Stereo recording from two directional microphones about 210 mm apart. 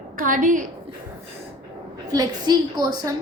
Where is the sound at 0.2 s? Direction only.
40° right (ahead or behind).